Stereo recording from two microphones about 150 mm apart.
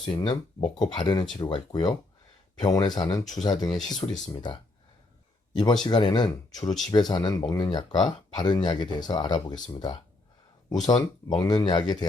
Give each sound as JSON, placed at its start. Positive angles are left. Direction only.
{"t": 0.1, "sound": "speech", "side_deg": 35}
{"t": 5.5, "sound": "speech", "side_deg": 30}
{"t": 10.7, "sound": "speech", "side_deg": 25}